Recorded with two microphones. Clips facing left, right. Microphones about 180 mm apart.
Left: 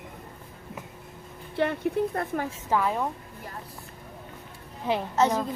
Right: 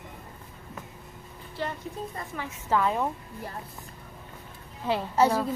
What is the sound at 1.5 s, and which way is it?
Speech, 65° left (ahead or behind).